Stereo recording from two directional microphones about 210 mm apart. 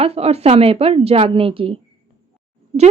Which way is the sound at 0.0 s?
30° right (ahead or behind).